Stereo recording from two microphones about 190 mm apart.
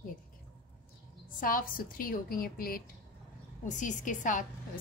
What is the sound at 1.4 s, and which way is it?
A woman's voice, 45° left (ahead or behind).